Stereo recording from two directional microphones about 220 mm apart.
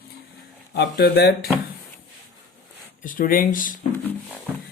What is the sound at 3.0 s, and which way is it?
Speech, 40° left (ahead or behind).